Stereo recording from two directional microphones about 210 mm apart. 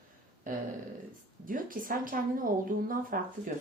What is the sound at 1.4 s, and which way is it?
Speech, 40° right (ahead or behind).